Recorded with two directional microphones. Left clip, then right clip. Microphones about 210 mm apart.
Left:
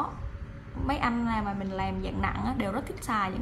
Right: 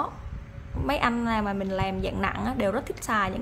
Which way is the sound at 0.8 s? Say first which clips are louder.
Right 4 dB; 35° right (ahead or behind).